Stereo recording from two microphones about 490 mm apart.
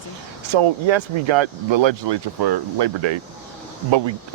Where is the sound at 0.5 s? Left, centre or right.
Right.